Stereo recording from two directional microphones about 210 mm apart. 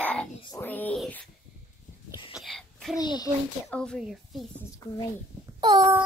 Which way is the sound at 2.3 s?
Centre (ahead or behind).